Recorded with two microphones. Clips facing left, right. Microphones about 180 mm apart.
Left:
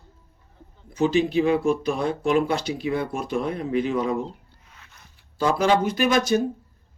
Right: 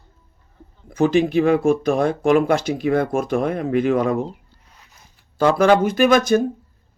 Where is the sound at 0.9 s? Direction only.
50° right (ahead or behind).